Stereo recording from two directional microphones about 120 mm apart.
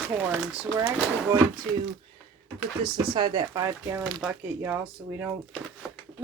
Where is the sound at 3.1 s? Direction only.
40° right (ahead or behind).